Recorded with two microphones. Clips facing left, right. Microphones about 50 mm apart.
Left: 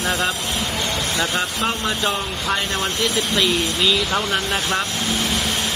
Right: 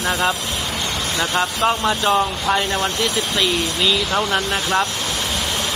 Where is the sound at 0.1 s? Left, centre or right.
Centre.